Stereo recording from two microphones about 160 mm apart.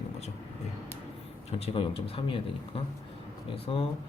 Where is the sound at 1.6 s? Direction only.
35° left (ahead or behind).